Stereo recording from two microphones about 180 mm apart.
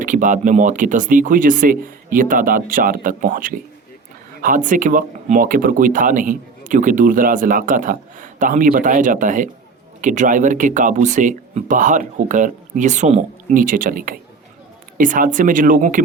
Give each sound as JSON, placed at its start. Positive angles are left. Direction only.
{"t": 0.0, "sound": "speech", "side_deg": -45}